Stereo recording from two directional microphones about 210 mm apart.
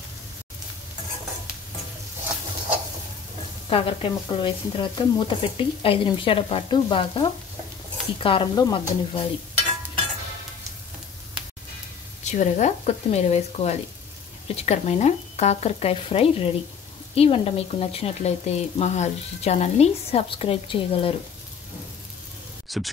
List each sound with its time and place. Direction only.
3.7 s speech: 25° left (ahead or behind)
12.3 s speech: 35° left (ahead or behind)
22.7 s speech: centre (ahead or behind)